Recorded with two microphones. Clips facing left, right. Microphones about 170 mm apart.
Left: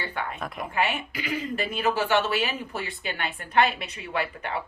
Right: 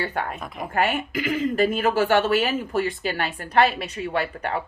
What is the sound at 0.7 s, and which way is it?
A woman's voice, 45° right (ahead or behind).